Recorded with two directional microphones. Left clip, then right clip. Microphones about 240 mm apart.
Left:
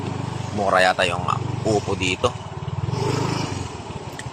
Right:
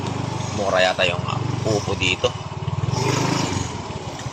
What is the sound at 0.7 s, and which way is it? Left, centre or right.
Speech, left.